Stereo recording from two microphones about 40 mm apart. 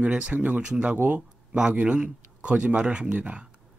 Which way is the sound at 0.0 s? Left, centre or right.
Right.